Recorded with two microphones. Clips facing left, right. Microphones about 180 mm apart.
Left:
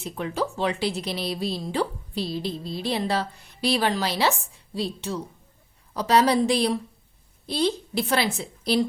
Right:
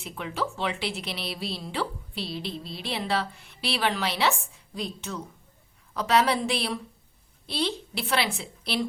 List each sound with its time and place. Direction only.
0.0 s a woman's voice: 40° left (ahead or behind)